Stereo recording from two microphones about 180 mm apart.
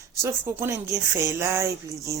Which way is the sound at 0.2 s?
10° right (ahead or behind).